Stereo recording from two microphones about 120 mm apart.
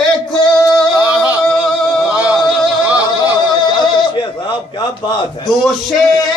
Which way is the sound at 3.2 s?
40° left (ahead or behind).